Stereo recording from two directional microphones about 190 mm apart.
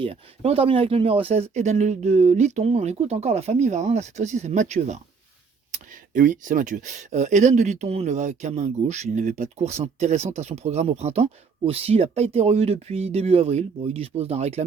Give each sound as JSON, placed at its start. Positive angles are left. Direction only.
{"t": 0.0, "sound": "speech", "side_deg": -30}